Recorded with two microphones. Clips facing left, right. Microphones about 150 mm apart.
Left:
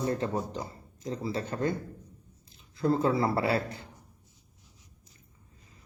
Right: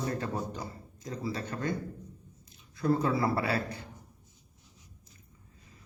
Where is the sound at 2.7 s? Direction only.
25° left (ahead or behind).